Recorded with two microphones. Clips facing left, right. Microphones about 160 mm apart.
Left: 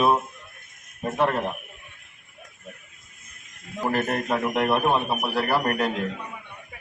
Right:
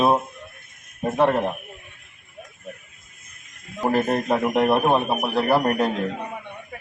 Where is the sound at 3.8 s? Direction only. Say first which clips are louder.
Right 4 dB; 30° right (ahead or behind).